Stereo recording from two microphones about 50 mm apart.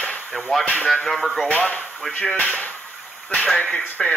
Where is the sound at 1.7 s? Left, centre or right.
Left.